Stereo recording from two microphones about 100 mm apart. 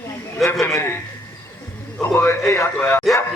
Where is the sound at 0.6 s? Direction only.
25° left (ahead or behind).